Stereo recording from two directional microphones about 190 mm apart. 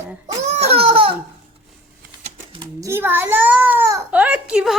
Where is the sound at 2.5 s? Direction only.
15° right (ahead or behind).